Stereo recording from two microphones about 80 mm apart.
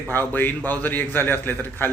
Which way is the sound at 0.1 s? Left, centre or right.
Left.